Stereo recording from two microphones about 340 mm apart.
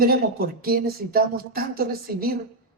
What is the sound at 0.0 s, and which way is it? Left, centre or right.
Speech, right.